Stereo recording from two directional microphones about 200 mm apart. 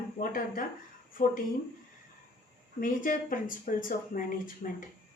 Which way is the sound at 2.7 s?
45° left (ahead or behind).